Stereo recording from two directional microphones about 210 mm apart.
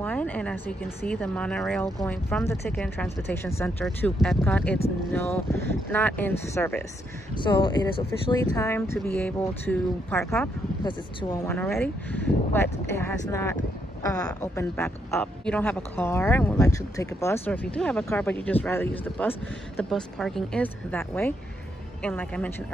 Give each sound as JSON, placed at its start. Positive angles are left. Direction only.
{"t": 0.0, "sound": "speech", "side_deg": 5}
{"t": 3.8, "sound": "a woman's voice", "side_deg": 0}
{"t": 7.3, "sound": "a woman's voice", "side_deg": 25}